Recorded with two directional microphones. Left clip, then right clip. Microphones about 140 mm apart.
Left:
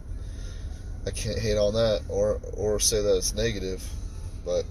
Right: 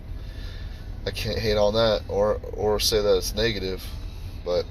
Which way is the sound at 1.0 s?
15° left (ahead or behind).